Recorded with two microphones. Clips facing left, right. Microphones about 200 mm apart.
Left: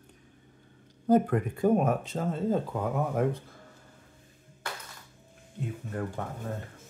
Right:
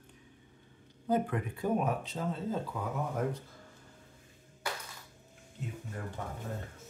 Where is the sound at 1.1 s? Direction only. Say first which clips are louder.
Left 7 dB; 45° left (ahead or behind).